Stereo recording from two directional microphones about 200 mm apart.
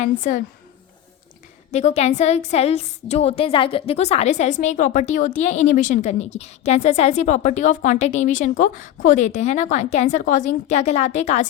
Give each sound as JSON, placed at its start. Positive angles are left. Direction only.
{"t": 0.0, "sound": "a woman's voice", "side_deg": 40}
{"t": 1.7, "sound": "a woman's voice", "side_deg": 35}